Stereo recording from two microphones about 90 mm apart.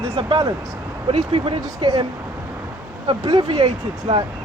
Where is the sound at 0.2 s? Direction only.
65° right (ahead or behind).